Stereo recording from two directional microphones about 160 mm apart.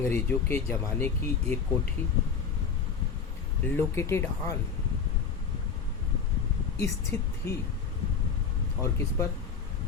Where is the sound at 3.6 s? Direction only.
15° left (ahead or behind).